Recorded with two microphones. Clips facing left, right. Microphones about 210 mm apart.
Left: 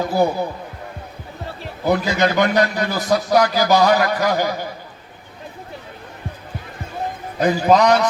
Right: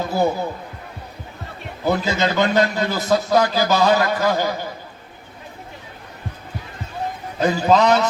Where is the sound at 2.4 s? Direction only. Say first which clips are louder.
Even; 15° left (ahead or behind).